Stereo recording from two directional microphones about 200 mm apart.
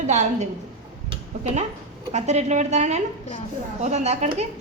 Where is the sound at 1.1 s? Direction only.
35° right (ahead or behind).